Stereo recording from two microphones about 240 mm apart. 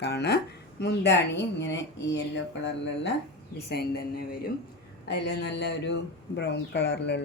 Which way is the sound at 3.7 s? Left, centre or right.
Left.